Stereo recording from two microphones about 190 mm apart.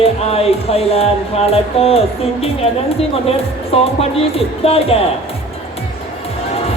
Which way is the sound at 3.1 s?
30° left (ahead or behind).